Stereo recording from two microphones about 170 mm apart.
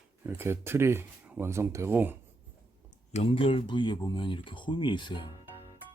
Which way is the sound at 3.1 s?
35° left (ahead or behind).